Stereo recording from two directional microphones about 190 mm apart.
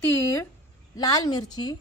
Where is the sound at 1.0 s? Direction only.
20° left (ahead or behind).